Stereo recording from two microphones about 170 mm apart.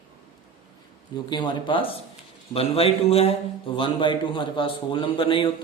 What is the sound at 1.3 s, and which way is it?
A man's voice, 25° left (ahead or behind).